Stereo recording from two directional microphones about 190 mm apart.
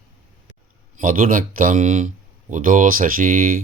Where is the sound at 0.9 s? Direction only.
45° right (ahead or behind).